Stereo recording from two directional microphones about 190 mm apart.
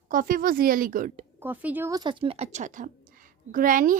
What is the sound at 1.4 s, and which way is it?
A woman's voice, 10° right (ahead or behind).